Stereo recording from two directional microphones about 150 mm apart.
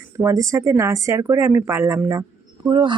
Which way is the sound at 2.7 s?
30° right (ahead or behind).